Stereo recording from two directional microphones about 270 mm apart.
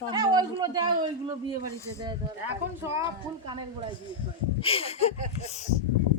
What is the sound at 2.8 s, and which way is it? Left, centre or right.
Speech, centre.